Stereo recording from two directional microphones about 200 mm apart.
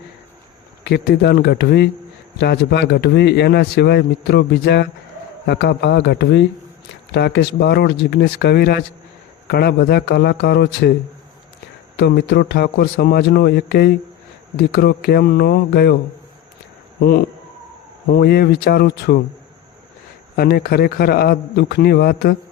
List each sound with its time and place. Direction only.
0.9 s a man's voice: 55° left (ahead or behind)
11.9 s a man's voice: 55° left (ahead or behind)
17.0 s a man's voice: 50° left (ahead or behind)
20.3 s a man's voice: 50° left (ahead or behind)